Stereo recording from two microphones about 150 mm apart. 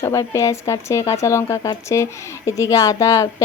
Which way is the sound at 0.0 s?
20° left (ahead or behind).